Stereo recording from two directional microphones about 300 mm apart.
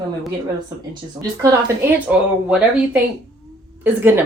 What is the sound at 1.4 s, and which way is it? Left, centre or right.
Speech, centre.